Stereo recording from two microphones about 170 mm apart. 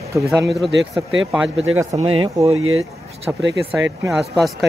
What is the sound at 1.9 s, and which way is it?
Speech, 30° right (ahead or behind).